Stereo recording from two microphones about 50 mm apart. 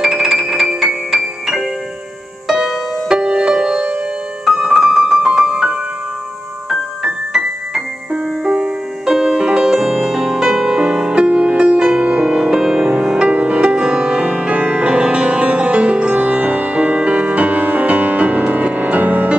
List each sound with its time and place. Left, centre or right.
0.0 s music: centre
4.5 s keyboard: centre
5.2 s music: centre
8.1 s music: right
12.3 s music: centre; by 19.3 s right